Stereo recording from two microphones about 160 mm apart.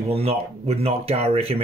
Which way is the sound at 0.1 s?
40° right (ahead or behind).